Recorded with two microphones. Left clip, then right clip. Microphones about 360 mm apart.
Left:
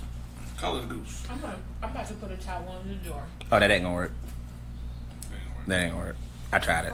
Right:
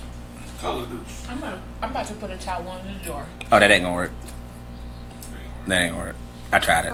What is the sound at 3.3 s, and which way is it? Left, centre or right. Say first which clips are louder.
Speech: right 7 dB; right.